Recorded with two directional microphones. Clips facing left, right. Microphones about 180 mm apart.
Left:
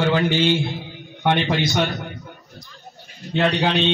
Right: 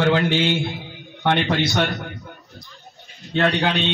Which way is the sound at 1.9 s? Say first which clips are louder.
Even; centre (ahead or behind).